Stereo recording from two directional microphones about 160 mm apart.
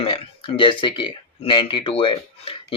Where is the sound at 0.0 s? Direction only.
35° left (ahead or behind).